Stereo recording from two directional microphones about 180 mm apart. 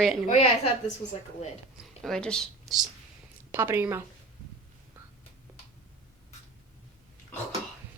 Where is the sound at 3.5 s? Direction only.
15° right (ahead or behind).